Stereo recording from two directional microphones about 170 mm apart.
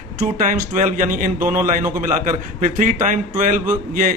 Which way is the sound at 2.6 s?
50° right (ahead or behind).